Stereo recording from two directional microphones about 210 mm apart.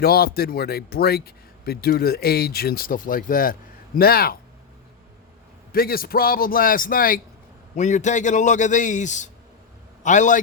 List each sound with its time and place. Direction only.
0.0 s speech: 45° left (ahead or behind)
5.7 s a man's voice: 45° left (ahead or behind)